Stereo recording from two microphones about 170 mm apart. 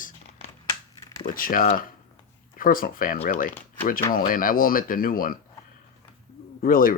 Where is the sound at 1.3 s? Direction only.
55° left (ahead or behind).